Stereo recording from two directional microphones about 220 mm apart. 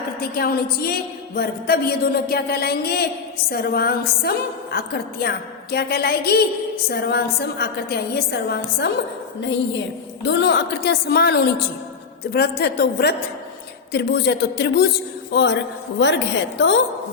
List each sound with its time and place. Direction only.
0.2 s a woman's voice: 45° left (ahead or behind)
10.2 s a woman's voice: 50° left (ahead or behind)